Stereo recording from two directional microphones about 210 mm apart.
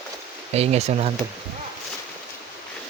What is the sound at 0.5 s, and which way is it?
Speech, 30° right (ahead or behind).